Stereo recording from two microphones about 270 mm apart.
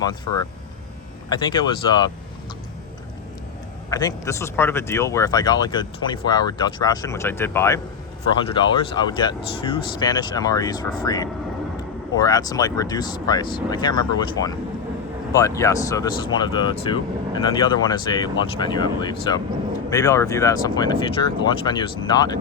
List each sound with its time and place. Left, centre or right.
1.3 s speech: centre
3.8 s speech: centre